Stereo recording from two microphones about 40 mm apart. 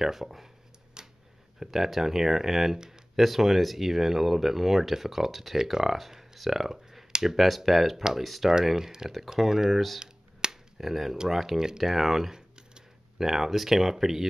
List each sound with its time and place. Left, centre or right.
0.0 s speech: centre
1.0 s a sound: centre
1.6 s speech: centre
9.9 s finger snapping: centre
10.8 s speech: centre
11.8 s computer keyboard: centre
13.3 s speech: centre